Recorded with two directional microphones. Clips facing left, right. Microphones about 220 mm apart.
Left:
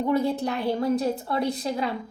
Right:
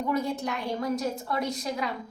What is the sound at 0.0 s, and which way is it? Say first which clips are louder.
A woman's voice: left 5 dB; 30° left (ahead or behind).